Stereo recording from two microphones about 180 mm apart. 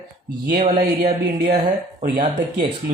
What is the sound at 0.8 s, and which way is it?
Speech, 45° right (ahead or behind).